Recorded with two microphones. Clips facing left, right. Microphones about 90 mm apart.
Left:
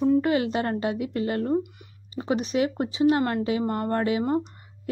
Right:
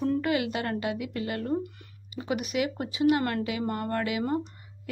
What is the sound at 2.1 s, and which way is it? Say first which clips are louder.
A woman's voice: left 4 dB; 30° left (ahead or behind).